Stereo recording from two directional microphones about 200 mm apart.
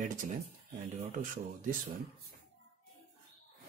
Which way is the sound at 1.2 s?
40° right (ahead or behind).